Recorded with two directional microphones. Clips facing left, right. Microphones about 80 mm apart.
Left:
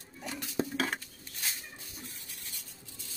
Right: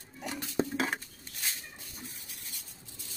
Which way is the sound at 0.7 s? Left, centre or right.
Centre.